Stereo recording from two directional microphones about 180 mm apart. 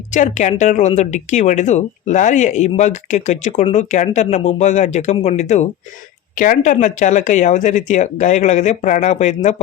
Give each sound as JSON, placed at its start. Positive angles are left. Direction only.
{"t": 0.1, "sound": "speech", "side_deg": 45}